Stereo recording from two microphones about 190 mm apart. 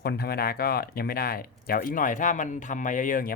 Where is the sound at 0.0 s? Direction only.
55° left (ahead or behind).